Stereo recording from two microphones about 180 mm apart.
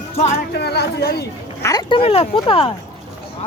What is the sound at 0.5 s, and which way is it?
Speech, 65° left (ahead or behind).